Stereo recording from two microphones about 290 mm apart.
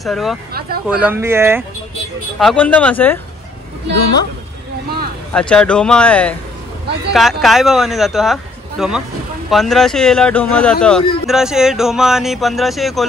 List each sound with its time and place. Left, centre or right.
0.0 s speech: centre
0.5 s speech: right
0.8 s speech: centre
2.3 s speech: centre
5.3 s speech: centre